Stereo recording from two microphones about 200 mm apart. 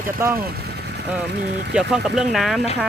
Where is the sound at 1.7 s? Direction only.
5° right (ahead or behind).